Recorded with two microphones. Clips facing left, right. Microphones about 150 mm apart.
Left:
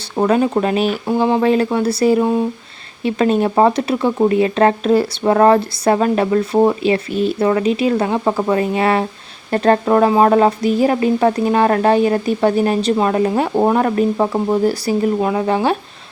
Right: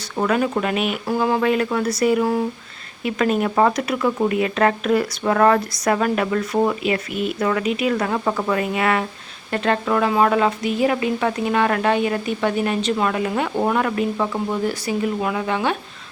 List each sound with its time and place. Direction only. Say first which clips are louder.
0.2 s speech: left 5 dB; 30° left (ahead or behind)